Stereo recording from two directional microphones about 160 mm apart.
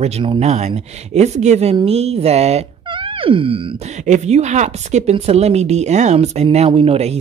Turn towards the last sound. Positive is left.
turn(degrees=-40)  # may be behind; listen again after turning